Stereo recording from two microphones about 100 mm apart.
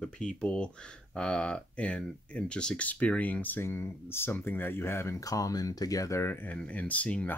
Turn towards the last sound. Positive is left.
turn(degrees=15)  # may be behind; listen again after turning